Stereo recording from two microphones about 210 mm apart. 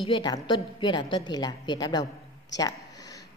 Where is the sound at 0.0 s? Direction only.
25° left (ahead or behind).